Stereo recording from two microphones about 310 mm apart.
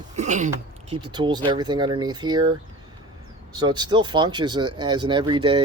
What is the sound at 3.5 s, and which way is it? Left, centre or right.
Speech, centre.